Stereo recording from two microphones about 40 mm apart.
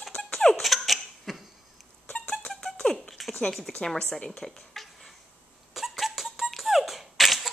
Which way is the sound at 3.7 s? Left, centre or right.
Centre.